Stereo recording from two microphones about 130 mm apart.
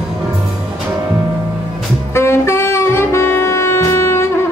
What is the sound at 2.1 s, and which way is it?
Saxophone, 20° left (ahead or behind).